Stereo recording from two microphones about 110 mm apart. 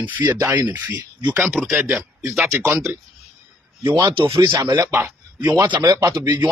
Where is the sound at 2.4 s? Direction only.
30° right (ahead or behind).